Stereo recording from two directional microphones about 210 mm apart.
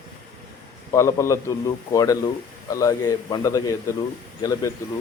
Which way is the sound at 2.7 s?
15° left (ahead or behind).